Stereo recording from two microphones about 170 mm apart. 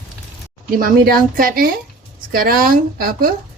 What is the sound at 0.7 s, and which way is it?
A woman's voice, 60° right (ahead or behind).